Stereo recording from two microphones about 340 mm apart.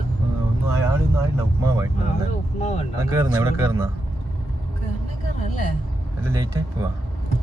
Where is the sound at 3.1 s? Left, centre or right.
Centre.